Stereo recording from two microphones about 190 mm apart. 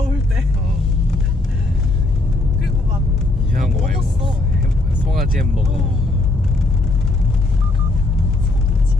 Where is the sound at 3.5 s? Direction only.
50° right (ahead or behind).